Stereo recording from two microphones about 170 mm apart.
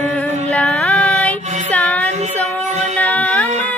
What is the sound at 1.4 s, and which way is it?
Child singing, 45° right (ahead or behind).